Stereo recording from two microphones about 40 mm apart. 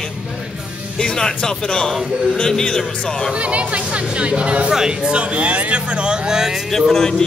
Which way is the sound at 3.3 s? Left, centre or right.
Right.